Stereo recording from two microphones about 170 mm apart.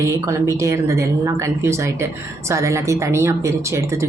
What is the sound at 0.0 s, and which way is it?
A woman's voice, 15° right (ahead or behind).